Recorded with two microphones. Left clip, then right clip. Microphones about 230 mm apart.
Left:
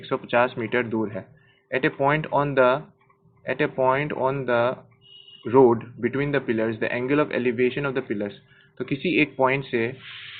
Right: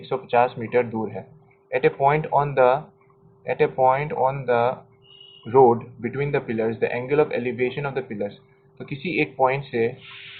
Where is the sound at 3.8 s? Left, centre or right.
Left.